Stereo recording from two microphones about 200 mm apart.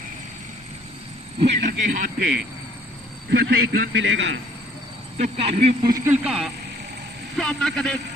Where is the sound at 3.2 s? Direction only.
55° right (ahead or behind).